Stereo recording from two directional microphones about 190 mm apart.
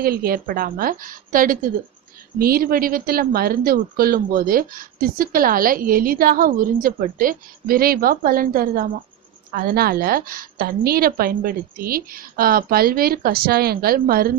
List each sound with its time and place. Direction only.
0.0 s speech: 50° right (ahead or behind)